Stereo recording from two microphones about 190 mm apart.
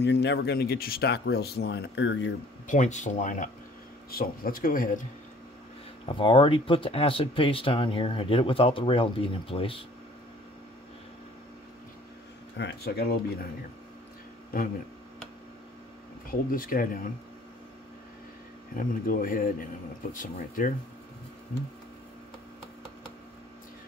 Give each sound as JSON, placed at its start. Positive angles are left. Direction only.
{"t": 0.0, "sound": "speech", "side_deg": 65}
{"t": 2.6, "sound": "speech", "side_deg": 40}
{"t": 6.0, "sound": "speech", "side_deg": 25}
{"t": 12.5, "sound": "speech", "side_deg": 60}
{"t": 16.3, "sound": "speech", "side_deg": 50}
{"t": 18.8, "sound": "speech", "side_deg": 45}